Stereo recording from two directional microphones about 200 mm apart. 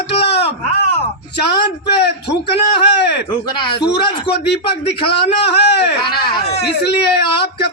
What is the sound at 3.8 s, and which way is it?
Speech, 55° left (ahead or behind).